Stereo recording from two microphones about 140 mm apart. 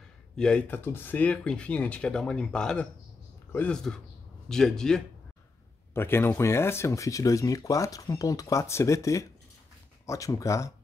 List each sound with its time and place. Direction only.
0.4 s speech: 10° left (ahead or behind)
5.9 s speech: 15° left (ahead or behind)